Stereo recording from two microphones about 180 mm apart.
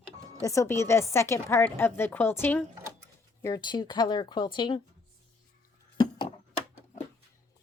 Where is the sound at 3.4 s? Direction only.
20° left (ahead or behind).